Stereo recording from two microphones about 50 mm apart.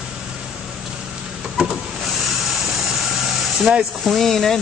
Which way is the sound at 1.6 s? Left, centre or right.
Centre.